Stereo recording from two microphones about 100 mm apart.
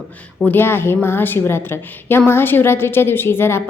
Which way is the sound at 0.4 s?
20° left (ahead or behind).